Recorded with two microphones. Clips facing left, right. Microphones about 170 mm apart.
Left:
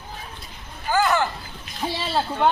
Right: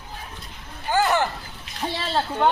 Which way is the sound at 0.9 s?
25° right (ahead or behind).